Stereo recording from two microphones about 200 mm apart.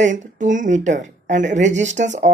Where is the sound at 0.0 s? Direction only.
40° right (ahead or behind).